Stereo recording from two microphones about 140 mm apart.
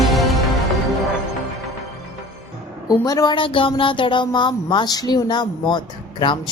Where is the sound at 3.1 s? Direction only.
30° left (ahead or behind).